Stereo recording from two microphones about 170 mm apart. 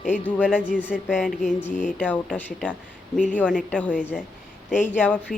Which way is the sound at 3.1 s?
50° left (ahead or behind).